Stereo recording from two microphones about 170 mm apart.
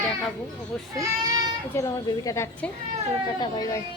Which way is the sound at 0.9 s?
25° right (ahead or behind).